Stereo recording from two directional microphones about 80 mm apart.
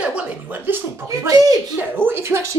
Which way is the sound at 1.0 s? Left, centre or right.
Right.